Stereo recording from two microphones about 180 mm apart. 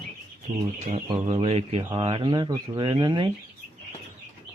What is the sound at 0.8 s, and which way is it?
Speech, 30° right (ahead or behind).